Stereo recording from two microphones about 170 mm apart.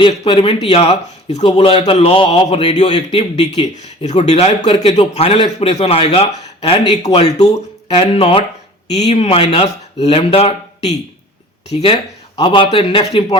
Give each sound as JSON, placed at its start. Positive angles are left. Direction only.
{"t": 0.0, "sound": "speech", "side_deg": 30}
{"t": 2.7, "sound": "a man's voice", "side_deg": 40}